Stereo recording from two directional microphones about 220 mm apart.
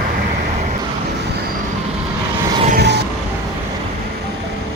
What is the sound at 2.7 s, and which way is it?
Vehicle, 50° right (ahead or behind).